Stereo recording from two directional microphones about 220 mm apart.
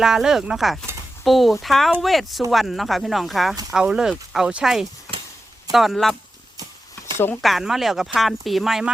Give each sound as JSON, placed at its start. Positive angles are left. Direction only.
{"t": 0.0, "sound": "speech", "side_deg": 0}
{"t": 7.4, "sound": "speech", "side_deg": 0}